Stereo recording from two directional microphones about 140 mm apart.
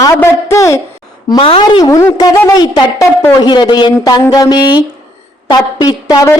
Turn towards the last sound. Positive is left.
turn(degrees=25)  # may be behind; listen again after turning